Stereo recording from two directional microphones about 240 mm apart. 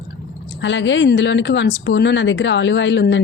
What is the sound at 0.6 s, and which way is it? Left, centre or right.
A woman's voice, left.